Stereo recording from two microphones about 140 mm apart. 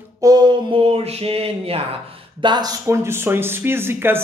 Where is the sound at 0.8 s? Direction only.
45° right (ahead or behind).